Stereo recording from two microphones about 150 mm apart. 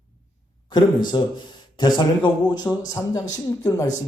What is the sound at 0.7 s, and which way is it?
Speech, 30° left (ahead or behind).